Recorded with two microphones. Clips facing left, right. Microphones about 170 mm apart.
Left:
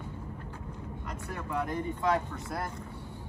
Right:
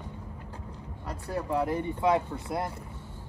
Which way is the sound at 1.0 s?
35° right (ahead or behind).